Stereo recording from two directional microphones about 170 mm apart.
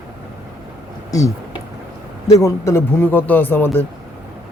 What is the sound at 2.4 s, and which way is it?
Speech, 15° left (ahead or behind).